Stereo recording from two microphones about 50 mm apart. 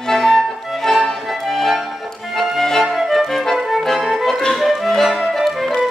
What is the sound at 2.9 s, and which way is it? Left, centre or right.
Music, centre.